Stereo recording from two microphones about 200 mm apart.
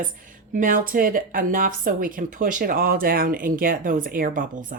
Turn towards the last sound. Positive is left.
turn(degrees=-45)  # may be behind; listen again after turning